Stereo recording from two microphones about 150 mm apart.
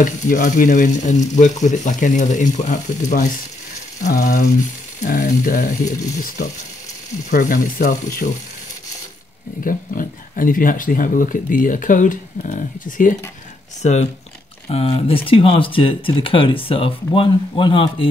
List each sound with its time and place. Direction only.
0.0 s speech: 55° left (ahead or behind)
9.7 s speech: 65° left (ahead or behind)
14.7 s speech: 45° left (ahead or behind)